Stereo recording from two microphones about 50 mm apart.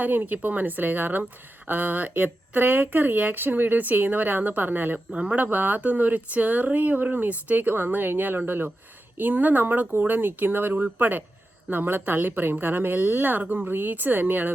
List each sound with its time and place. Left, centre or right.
0.0 s speech: right
5.1 s speech: right
5.4 s speech: right